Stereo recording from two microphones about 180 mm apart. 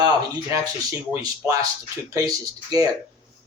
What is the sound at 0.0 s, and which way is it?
Speech, 20° right (ahead or behind).